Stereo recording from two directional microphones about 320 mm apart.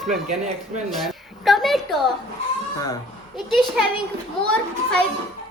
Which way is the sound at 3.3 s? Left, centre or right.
Centre.